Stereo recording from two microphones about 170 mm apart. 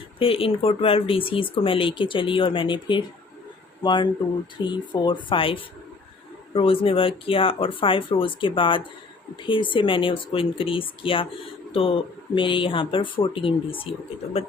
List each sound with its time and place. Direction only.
0.2 s speech: 35° left (ahead or behind)